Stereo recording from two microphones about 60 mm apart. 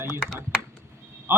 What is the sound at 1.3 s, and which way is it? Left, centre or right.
Speech, right.